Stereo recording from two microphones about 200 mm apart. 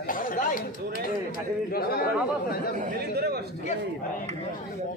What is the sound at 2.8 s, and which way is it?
Speech, 45° right (ahead or behind).